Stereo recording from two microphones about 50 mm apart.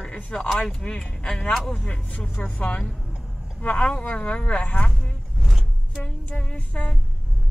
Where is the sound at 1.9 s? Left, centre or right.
Left.